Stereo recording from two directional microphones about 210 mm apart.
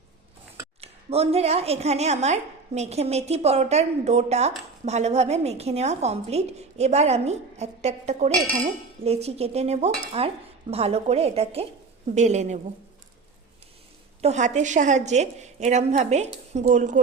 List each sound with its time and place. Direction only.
0.8 s a woman's voice: 30° right (ahead or behind)
14.2 s a woman's voice: 30° right (ahead or behind)